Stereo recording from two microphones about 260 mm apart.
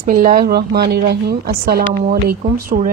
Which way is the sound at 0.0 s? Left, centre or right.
Right.